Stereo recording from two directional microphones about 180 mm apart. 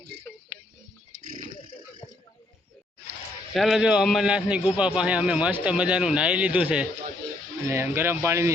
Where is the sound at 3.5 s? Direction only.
Centre (ahead or behind).